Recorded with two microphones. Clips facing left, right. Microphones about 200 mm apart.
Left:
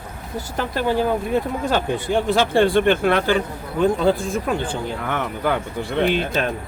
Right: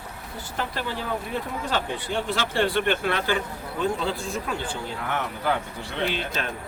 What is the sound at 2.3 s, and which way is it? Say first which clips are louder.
Speech: left 8 dB; 50° left (ahead or behind).